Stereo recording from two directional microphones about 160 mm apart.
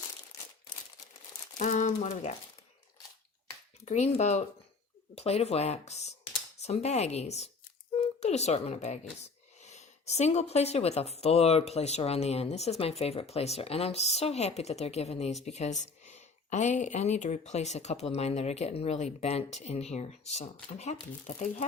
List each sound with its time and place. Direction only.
1.5 s speech: 50° left (ahead or behind)
3.8 s speech: 45° left (ahead or behind)